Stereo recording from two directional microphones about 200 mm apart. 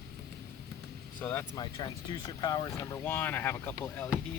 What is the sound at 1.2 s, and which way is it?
Speech, 10° left (ahead or behind).